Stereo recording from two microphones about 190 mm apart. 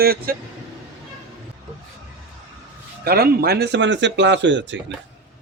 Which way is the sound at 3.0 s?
50° right (ahead or behind).